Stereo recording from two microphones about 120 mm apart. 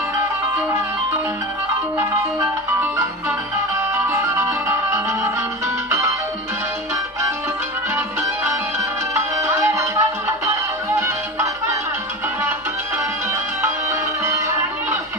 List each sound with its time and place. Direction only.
0.6 s music: 15° right (ahead or behind)
2.8 s music: 25° right (ahead or behind)
9.7 s music: 25° right (ahead or behind)
13.3 s music: 25° right (ahead or behind)